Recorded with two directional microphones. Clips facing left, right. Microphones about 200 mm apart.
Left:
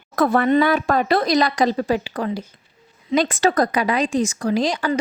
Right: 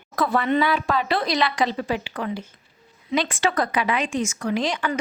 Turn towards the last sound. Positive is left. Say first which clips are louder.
# left 4 dB
turn(degrees=35)  # may be behind; listen again after turning